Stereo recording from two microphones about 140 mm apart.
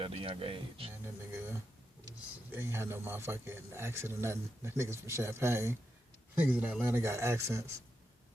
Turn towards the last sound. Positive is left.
turn(degrees=-20)  # may be behind; listen again after turning